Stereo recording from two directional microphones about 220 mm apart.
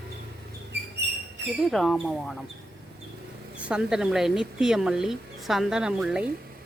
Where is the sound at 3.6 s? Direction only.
5° right (ahead or behind).